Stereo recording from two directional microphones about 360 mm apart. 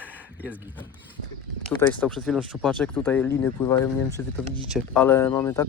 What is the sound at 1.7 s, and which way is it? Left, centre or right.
Speech, centre.